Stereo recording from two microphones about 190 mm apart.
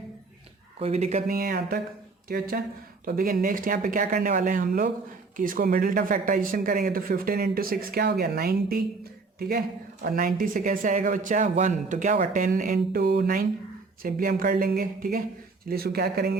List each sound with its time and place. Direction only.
0.8 s speech: 35° right (ahead or behind)
1.3 s speech: 50° right (ahead or behind)
10.0 s speech: 50° right (ahead or behind)